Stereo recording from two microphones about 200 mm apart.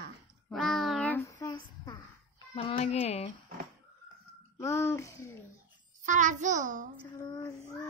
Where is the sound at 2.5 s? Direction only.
30° left (ahead or behind).